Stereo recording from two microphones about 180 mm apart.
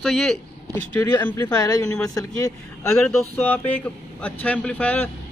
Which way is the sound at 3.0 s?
10° left (ahead or behind).